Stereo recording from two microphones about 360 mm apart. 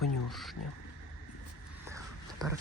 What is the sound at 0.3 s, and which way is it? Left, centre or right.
Frog, centre.